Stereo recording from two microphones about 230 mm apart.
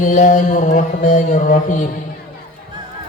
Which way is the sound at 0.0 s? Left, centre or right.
Left.